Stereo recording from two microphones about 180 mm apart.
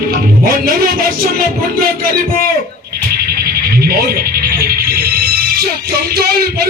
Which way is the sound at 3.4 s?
60° right (ahead or behind).